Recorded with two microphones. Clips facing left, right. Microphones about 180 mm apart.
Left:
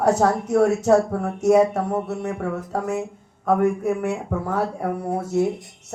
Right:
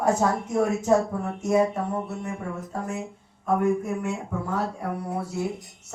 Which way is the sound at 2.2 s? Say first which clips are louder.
Left 6 dB; 75° left (ahead or behind).